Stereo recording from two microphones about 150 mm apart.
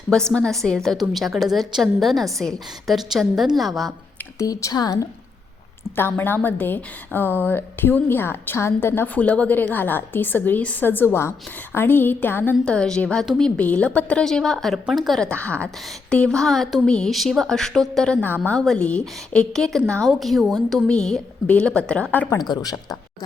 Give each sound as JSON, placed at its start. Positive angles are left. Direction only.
{"t": 0.1, "sound": "a woman's voice", "side_deg": 5}
{"t": 4.4, "sound": "speech", "side_deg": 20}
{"t": 6.0, "sound": "a woman's voice", "side_deg": 15}
{"t": 22.4, "sound": "speech", "side_deg": 25}